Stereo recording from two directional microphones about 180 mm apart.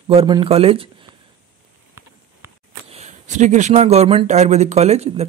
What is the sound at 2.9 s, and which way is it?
A man's voice, 40° right (ahead or behind).